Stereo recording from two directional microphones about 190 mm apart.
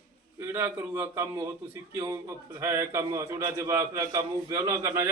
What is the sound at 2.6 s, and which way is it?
A man's voice, 15° right (ahead or behind).